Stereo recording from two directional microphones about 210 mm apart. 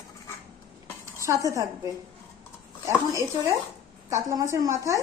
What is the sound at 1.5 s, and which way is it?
Speech, 15° right (ahead or behind).